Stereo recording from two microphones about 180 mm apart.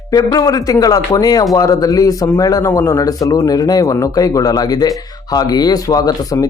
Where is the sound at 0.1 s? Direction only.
20° left (ahead or behind).